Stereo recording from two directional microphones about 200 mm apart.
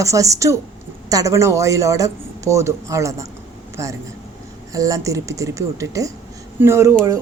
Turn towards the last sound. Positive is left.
turn(degrees=-15)  # may be behind; listen again after turning